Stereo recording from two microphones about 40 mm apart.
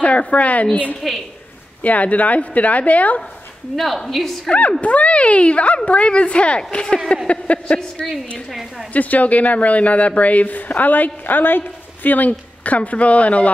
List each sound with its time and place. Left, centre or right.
0.0 s speech: left
1.0 s a woman's voice: centre
1.8 s speech: left
3.7 s a woman's voice: centre
4.5 s speech: left
8.5 s a woman's voice: centre
8.9 s speech: left